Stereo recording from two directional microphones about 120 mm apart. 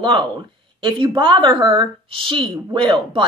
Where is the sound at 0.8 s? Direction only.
40° right (ahead or behind).